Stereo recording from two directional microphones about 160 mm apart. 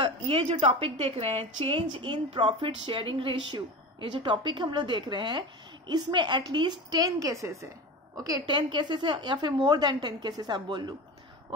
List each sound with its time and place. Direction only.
0.0 s a woman's voice: 35° right (ahead or behind)